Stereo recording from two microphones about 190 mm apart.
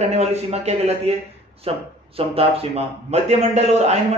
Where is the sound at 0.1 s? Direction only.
35° right (ahead or behind).